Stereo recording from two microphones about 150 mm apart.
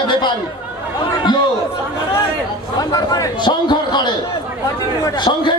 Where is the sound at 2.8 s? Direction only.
25° left (ahead or behind).